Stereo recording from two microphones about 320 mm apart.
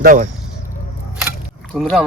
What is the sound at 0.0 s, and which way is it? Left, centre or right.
Speech, right.